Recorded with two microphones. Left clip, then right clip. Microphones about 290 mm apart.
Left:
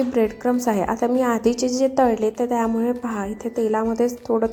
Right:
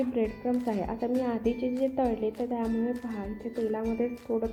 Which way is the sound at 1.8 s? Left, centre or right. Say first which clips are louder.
Left 10 dB; left.